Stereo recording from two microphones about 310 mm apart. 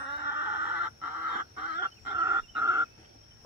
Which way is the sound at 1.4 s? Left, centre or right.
Right.